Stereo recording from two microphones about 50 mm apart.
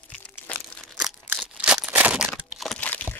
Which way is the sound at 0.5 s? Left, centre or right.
Left.